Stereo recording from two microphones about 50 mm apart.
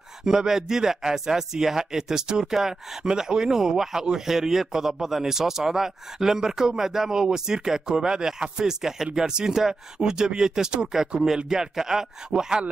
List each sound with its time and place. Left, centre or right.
0.2 s speech: centre